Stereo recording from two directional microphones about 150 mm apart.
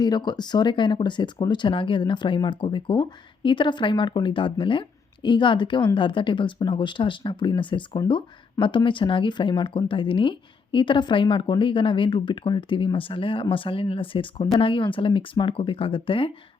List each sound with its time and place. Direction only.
0.0 s speech: 30° left (ahead or behind)